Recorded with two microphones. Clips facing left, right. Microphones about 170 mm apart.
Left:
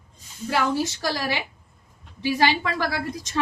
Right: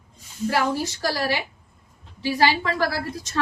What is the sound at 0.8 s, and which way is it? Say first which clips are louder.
A woman's voice: right 1 dB; 20° left (ahead or behind).